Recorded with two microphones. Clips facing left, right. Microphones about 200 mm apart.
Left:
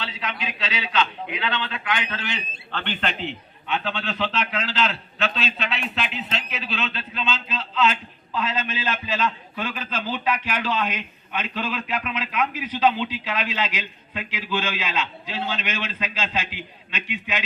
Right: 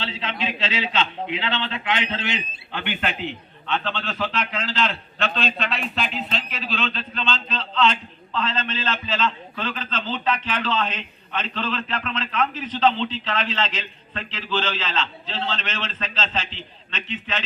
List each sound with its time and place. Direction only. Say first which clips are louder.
0.0 s a man's voice: right 3 dB; 25° right (ahead or behind); by 3.3 s 5° right (ahead or behind)
3.7 s a man's voice: even; 10° left (ahead or behind)